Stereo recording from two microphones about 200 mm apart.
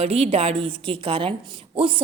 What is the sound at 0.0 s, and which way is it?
A woman's voice, 30° right (ahead or behind).